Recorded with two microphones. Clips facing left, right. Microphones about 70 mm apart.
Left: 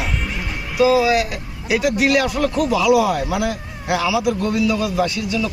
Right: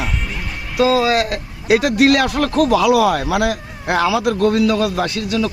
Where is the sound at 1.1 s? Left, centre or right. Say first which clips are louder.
Right 1 dB; right.